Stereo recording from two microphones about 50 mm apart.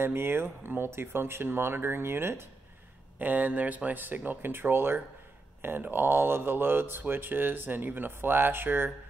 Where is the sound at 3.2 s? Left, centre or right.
Right.